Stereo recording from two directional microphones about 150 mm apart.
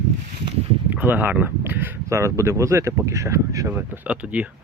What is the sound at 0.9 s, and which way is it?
Speech, 10° right (ahead or behind).